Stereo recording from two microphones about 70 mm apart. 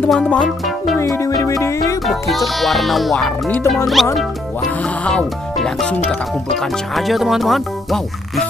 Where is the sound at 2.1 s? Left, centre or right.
Centre.